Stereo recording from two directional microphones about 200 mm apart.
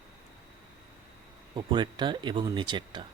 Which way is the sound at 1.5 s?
25° right (ahead or behind).